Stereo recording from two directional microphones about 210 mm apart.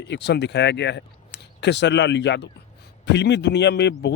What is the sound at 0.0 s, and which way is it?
A man's voice, 55° left (ahead or behind).